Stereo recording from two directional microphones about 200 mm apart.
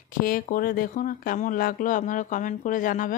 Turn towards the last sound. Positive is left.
turn(degrees=40)  # may be behind; listen again after turning